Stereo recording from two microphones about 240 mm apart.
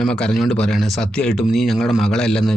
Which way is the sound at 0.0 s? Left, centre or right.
Centre.